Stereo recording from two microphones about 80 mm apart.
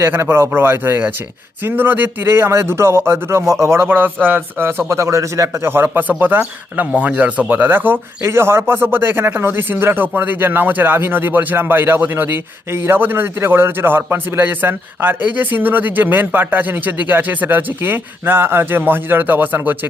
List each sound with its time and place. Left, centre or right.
0.0 s a man's voice: right
3.8 s speech: right